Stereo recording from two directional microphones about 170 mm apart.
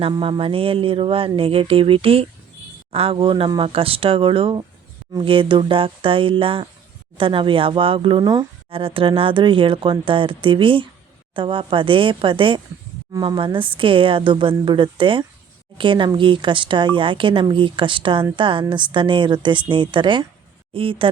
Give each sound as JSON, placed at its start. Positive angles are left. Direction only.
{"t": 0.0, "sound": "speech", "side_deg": -30}